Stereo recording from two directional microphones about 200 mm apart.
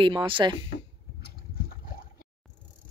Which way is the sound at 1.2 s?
50° left (ahead or behind).